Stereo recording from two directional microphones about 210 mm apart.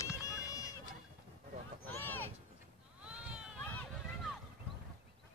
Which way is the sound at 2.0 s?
10° left (ahead or behind).